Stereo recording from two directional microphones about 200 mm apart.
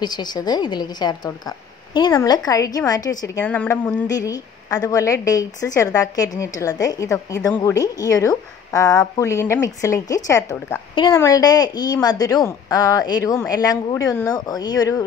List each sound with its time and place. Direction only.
0.0 s a woman's voice: 20° left (ahead or behind)